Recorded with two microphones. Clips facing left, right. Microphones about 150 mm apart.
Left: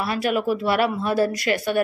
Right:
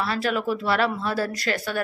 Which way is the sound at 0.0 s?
15° left (ahead or behind).